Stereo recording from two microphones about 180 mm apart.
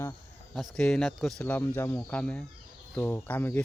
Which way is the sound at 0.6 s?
5° left (ahead or behind).